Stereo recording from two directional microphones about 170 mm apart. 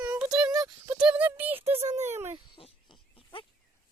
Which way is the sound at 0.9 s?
10° right (ahead or behind).